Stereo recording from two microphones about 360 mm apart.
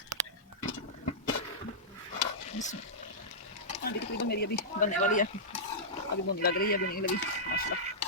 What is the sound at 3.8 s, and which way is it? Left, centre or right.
Speech, left.